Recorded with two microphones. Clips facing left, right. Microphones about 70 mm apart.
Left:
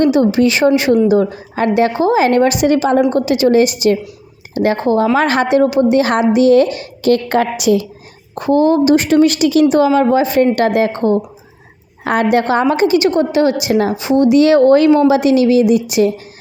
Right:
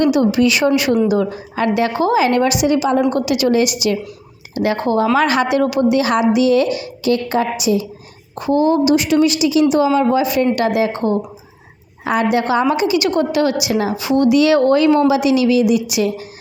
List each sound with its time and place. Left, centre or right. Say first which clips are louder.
0.0 s a woman's voice: left 2 dB; left
3.1 s a woman's voice: left 3 dB; left
8.4 s a woman's voice: left 3 dB; left
13.1 s a woman's voice: left 3 dB; left
13.9 s a woman's voice: left 1 dB; left
15.1 s a woman's voice: left 3 dB; left